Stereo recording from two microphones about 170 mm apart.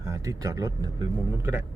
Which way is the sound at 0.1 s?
20° right (ahead or behind).